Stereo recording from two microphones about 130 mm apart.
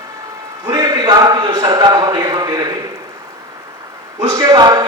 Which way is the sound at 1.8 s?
30° right (ahead or behind).